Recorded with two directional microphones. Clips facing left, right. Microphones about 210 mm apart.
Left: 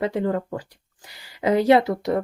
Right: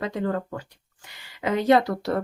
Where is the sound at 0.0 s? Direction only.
25° left (ahead or behind).